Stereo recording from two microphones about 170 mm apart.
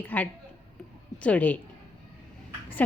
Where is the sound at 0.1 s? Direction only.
10° left (ahead or behind).